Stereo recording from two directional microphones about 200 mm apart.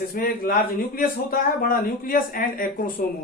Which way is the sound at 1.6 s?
45° left (ahead or behind).